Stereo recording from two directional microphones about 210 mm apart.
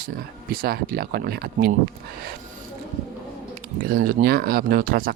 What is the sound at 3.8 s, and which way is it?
Speech, 45° right (ahead or behind).